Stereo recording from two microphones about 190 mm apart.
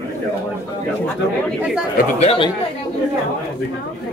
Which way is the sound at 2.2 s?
30° left (ahead or behind).